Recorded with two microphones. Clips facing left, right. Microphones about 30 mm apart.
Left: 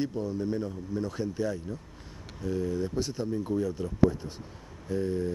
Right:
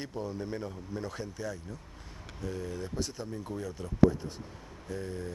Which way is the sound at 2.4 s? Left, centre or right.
Centre.